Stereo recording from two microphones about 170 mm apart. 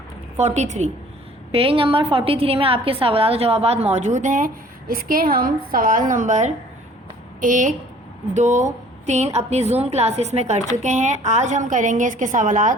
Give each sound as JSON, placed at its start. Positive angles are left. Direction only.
{"t": 0.3, "sound": "a woman's voice", "side_deg": -40}